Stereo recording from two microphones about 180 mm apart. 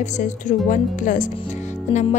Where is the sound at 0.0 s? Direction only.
45° left (ahead or behind).